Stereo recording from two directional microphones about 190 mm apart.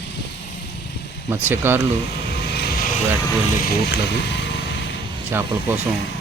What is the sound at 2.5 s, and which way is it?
Vehicle, 55° left (ahead or behind).